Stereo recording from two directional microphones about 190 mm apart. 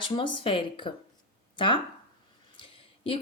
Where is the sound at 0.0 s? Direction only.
25° left (ahead or behind).